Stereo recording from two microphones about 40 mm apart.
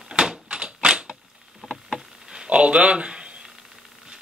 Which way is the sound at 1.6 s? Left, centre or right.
Centre.